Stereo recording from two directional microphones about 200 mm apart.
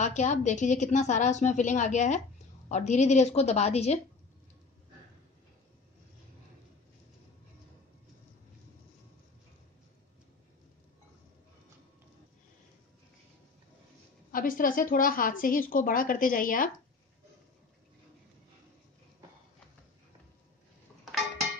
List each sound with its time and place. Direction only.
0.0 s a woman's voice: 35° left (ahead or behind)
14.3 s a woman's voice: 45° left (ahead or behind)